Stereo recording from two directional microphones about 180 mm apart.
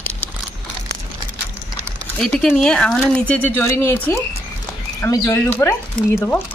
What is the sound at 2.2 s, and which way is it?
Speech, 5° left (ahead or behind).